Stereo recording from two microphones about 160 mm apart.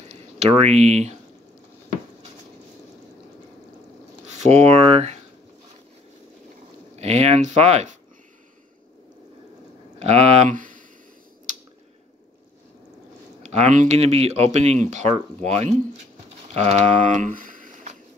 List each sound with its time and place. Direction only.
0.0 s speech: 40° right (ahead or behind)
4.3 s speech: 40° right (ahead or behind)
7.0 s speech: 40° right (ahead or behind)
9.9 s speech: 40° right (ahead or behind)
10.5 s a sound: 55° right (ahead or behind)
13.4 s speech: 45° right (ahead or behind)